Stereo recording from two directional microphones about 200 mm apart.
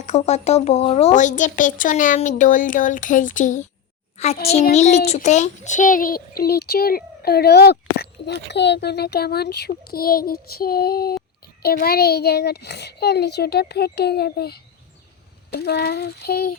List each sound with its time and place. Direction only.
0.0 s a child's voice: 35° left (ahead or behind); by 16.6 s 50° left (ahead or behind)